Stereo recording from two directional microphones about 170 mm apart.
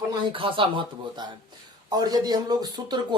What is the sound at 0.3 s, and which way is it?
Speech, 30° right (ahead or behind).